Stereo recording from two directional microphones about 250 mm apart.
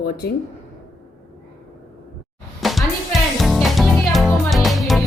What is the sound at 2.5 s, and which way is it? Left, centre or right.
Music, centre.